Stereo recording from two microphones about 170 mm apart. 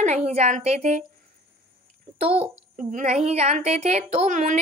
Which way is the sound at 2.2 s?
35° right (ahead or behind).